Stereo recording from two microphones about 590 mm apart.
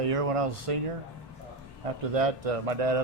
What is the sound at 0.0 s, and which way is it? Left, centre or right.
Speech, right.